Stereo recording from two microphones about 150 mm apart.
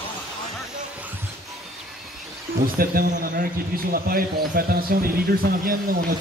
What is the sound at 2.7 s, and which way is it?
Speech, 75° right (ahead or behind).